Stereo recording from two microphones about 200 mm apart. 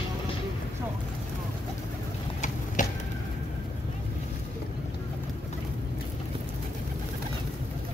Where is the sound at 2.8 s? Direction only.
40° left (ahead or behind).